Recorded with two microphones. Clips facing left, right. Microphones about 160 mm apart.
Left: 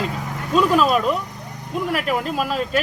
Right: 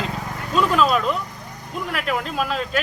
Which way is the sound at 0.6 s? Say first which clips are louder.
Left 2 dB; 5° left (ahead or behind).